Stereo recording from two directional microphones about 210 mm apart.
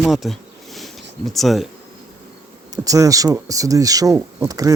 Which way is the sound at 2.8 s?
15° right (ahead or behind).